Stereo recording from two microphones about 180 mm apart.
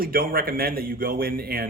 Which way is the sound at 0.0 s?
55° right (ahead or behind).